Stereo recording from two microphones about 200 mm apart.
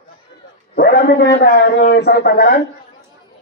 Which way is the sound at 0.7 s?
50° left (ahead or behind).